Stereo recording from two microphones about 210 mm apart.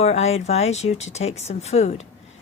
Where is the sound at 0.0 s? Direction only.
30° left (ahead or behind).